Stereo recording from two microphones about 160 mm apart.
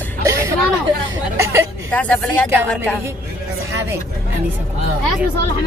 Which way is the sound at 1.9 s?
10° left (ahead or behind).